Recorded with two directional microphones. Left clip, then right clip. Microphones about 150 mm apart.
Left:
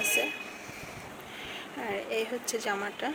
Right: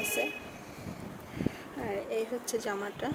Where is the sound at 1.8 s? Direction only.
10° right (ahead or behind).